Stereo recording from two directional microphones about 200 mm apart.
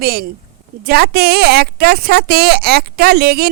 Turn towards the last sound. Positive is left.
turn(degrees=-50)  # may be behind; listen again after turning